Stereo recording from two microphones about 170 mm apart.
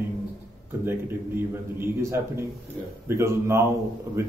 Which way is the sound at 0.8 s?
15° right (ahead or behind).